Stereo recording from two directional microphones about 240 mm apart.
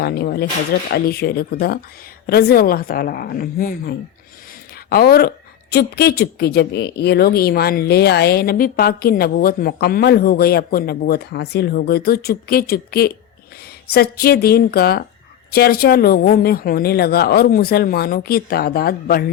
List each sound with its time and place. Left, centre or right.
0.0 s a woman's voice: left